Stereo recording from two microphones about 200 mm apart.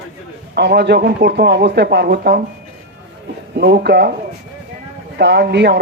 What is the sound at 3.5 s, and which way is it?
Speech, 55° right (ahead or behind).